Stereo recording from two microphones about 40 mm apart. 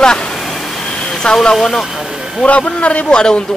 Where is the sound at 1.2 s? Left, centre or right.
Left.